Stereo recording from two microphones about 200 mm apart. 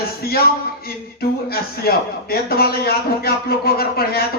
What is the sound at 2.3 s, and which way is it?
A man's voice, 50° left (ahead or behind).